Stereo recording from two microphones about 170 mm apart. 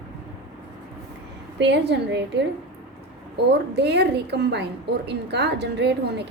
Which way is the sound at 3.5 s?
80° right.